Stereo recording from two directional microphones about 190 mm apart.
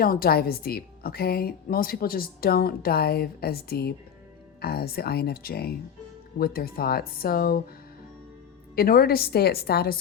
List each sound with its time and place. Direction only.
0.0 s a woman's voice: 50° left (ahead or behind)
8.7 s a woman's voice: 50° left (ahead or behind)